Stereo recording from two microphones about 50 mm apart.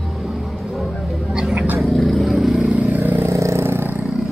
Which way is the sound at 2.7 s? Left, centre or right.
Right.